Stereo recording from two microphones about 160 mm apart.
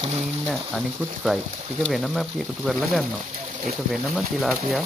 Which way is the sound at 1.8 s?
Centre (ahead or behind).